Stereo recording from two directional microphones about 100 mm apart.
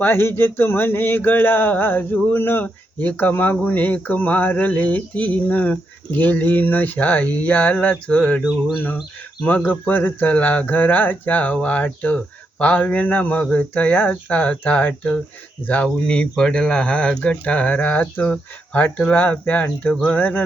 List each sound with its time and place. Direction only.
0.0 s speech: 25° left (ahead or behind)
9.4 s speech: 15° left (ahead or behind)